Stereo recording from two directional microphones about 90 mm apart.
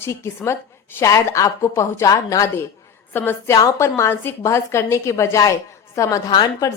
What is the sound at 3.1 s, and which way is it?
Speech, 25° left (ahead or behind).